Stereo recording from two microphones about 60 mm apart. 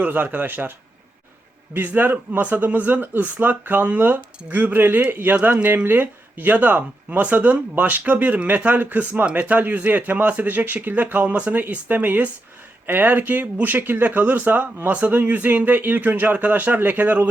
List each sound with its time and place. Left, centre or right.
0.0 s speech: right
1.7 s speech: right